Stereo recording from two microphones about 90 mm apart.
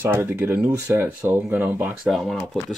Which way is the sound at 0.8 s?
30° right (ahead or behind).